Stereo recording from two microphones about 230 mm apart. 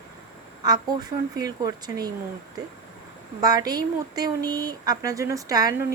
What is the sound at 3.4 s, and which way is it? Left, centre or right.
A woman's voice, centre.